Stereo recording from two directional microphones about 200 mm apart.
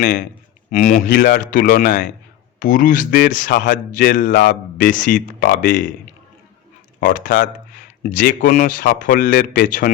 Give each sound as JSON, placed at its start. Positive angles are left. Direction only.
{"t": 0.0, "sound": "a man's voice", "side_deg": 45}
{"t": 7.0, "sound": "a man's voice", "side_deg": 45}